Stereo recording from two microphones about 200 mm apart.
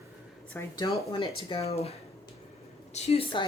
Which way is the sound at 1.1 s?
25° left (ahead or behind).